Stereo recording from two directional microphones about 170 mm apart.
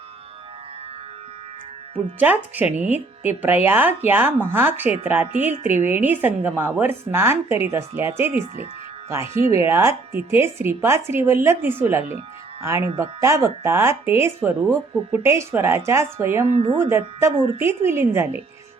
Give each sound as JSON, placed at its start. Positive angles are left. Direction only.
{"t": 2.1, "sound": "speech", "side_deg": -10}
{"t": 16.5, "sound": "speech", "side_deg": -35}
{"t": 16.7, "sound": "speech", "side_deg": -15}